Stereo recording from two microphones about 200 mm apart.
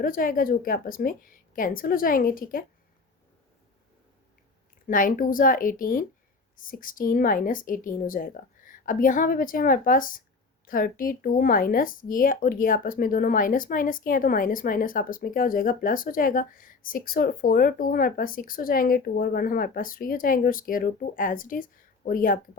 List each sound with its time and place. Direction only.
0.0 s speech: 45° left (ahead or behind)
4.9 s speech: 40° left (ahead or behind)